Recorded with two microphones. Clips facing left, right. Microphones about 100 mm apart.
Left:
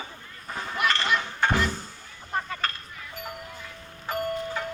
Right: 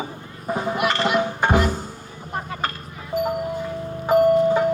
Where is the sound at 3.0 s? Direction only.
35° right (ahead or behind).